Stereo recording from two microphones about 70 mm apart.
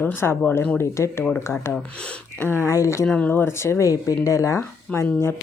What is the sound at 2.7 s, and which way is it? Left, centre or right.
Speech, left.